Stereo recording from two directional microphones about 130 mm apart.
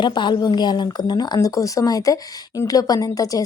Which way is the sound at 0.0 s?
35° left (ahead or behind).